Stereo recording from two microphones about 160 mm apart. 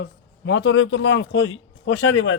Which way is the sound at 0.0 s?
90° left.